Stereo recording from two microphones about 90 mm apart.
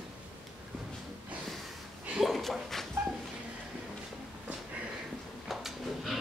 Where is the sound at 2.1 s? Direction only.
Centre (ahead or behind).